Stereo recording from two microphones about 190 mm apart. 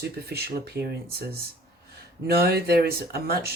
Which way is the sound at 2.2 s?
55° right (ahead or behind).